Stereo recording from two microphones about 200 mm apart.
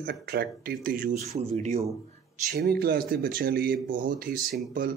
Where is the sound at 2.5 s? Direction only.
50° right (ahead or behind).